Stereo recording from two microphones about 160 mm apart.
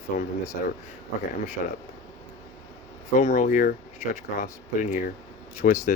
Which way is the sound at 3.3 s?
55° left (ahead or behind).